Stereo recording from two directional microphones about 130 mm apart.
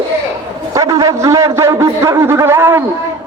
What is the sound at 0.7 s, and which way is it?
A man's voice, 25° right (ahead or behind).